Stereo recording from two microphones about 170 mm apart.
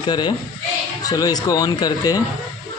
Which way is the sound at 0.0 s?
25° left (ahead or behind).